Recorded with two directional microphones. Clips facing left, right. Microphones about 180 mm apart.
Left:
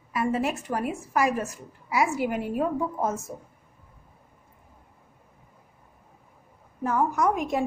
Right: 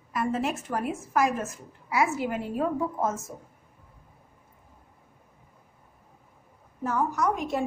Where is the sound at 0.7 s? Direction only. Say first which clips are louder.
Left 1 dB; 10° left (ahead or behind).